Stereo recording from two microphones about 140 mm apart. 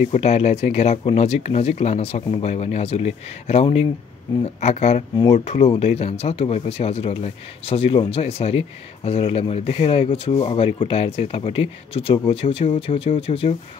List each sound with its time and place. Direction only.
0.1 s speech: 50° left (ahead or behind)